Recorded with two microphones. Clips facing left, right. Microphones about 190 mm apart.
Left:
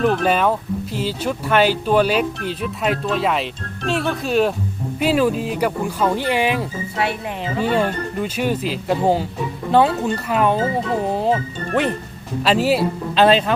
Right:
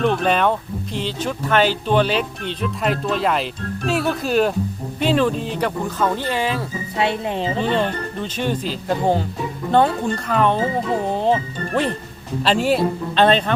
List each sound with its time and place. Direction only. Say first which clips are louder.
0.0 s speech: left 1 dB; 5° left (ahead or behind)
6.9 s speech: right 4 dB; 25° right (ahead or behind)
7.6 s speech: left 4 dB; 10° left (ahead or behind)